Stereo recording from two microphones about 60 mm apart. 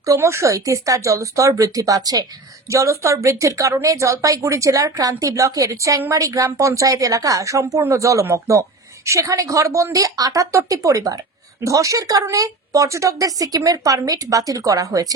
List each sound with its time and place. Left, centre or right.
0.2 s speech: right
2.6 s speech: right
10.7 s speech: right
11.6 s speech: right